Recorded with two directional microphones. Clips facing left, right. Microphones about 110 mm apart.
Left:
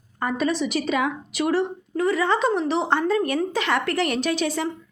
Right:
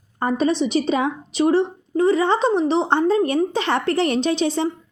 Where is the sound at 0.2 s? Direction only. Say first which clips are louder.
Right 4 dB; 30° right (ahead or behind).